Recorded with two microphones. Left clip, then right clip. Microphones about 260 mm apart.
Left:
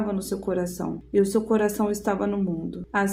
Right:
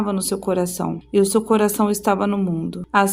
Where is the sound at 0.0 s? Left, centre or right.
Right.